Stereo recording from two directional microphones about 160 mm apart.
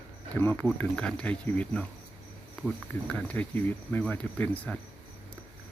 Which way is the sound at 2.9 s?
10° left (ahead or behind).